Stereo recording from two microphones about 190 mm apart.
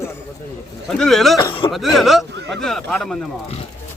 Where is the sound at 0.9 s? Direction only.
Centre (ahead or behind).